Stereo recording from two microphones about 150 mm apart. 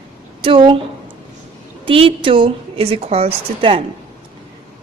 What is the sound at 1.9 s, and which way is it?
A woman's voice, 35° right (ahead or behind).